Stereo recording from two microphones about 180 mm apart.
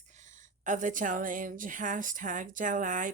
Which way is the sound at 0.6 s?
45° right (ahead or behind).